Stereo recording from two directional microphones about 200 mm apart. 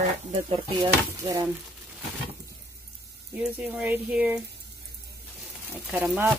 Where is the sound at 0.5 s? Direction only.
20° right (ahead or behind).